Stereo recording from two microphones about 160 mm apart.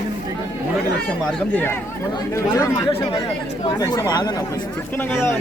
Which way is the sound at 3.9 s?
25° left (ahead or behind).